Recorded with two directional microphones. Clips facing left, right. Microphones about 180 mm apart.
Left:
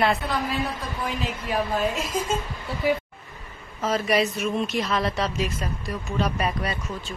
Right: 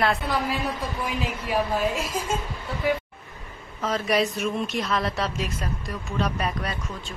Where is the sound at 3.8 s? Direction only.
Centre (ahead or behind).